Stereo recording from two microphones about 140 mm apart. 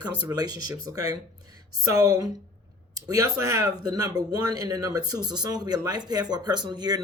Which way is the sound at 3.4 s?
25° right (ahead or behind).